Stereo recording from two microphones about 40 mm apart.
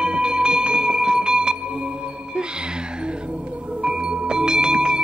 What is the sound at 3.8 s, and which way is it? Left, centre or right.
Music, right.